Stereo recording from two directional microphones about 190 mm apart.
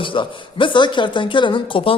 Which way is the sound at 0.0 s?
25° left (ahead or behind).